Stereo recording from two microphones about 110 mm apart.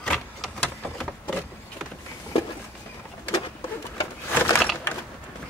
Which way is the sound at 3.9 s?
30° left (ahead or behind).